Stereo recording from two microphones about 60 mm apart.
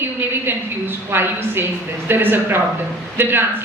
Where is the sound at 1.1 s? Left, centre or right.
Right.